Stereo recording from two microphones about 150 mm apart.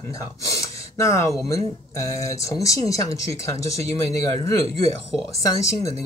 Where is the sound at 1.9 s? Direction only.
20° left (ahead or behind).